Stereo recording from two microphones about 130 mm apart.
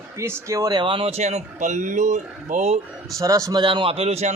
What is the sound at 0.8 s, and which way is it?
Speech, 45° right (ahead or behind).